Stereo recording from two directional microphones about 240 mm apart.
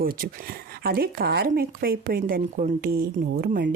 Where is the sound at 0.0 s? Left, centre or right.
Right.